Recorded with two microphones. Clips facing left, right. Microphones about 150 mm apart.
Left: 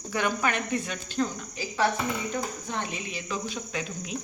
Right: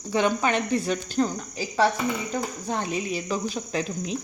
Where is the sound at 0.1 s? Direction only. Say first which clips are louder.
Right 5 dB; 25° right (ahead or behind).